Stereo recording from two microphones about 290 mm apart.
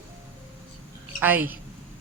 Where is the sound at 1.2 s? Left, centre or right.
Centre.